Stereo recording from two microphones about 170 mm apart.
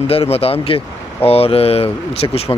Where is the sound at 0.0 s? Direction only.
35° left (ahead or behind).